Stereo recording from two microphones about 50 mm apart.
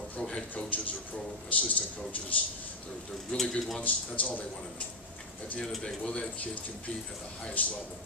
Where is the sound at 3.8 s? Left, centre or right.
Left.